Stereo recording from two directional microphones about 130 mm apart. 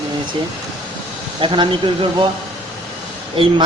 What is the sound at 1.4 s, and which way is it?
Speech, 40° right (ahead or behind).